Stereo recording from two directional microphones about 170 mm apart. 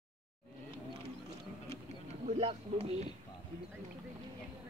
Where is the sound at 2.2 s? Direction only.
35° right (ahead or behind).